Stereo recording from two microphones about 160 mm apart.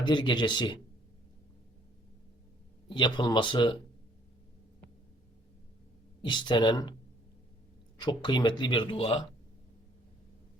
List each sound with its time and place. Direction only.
0.0 s speech: 30° left (ahead or behind)
2.9 s speech: 30° left (ahead or behind)
6.2 s speech: 30° left (ahead or behind)
7.9 s speech: 25° left (ahead or behind)